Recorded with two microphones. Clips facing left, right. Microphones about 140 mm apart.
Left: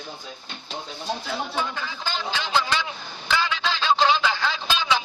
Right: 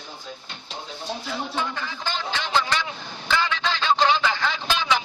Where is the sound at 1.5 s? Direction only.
5° left (ahead or behind).